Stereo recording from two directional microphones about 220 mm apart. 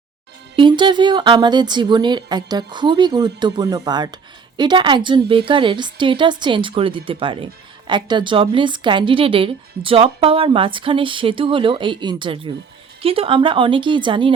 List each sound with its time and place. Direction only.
0.5 s speech: 20° right (ahead or behind)